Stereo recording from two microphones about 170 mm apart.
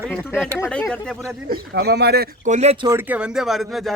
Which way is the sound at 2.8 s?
10° right (ahead or behind).